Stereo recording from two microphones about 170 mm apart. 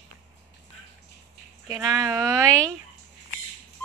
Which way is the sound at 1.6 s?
20° right (ahead or behind).